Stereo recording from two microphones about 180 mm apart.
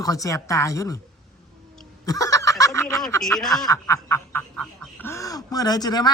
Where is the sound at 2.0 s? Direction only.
20° left (ahead or behind).